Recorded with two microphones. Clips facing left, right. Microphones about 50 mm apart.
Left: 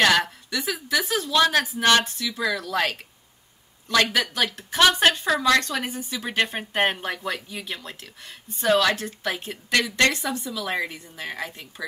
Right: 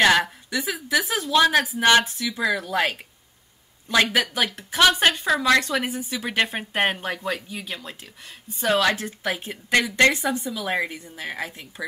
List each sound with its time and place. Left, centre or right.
0.0 s a woman's voice: centre
9.5 s a woman's voice: right